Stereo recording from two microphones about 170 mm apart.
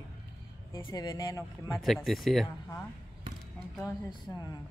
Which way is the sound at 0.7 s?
20° left (ahead or behind).